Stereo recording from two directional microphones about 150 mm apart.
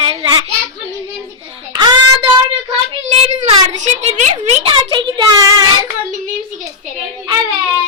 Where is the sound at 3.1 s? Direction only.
50° right (ahead or behind); by 5.5 s 25° right (ahead or behind).